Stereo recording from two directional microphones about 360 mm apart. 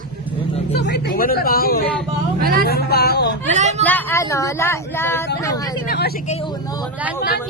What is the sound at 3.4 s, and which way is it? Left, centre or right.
Speech, centre.